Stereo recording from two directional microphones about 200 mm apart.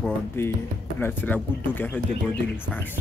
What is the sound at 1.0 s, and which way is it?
Speech, 10° left (ahead or behind).